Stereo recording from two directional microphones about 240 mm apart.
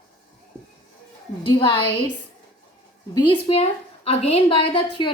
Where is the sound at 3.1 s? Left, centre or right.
Left.